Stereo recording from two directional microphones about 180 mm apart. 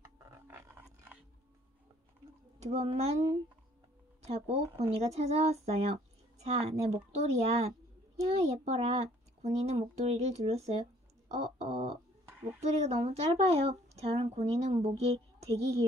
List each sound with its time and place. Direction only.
0.0 s a sound: 15° right (ahead or behind)
2.6 s a woman's voice: 35° right (ahead or behind)
4.3 s a woman's voice: 35° right (ahead or behind)